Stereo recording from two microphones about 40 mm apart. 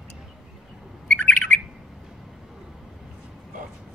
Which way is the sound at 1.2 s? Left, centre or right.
Left.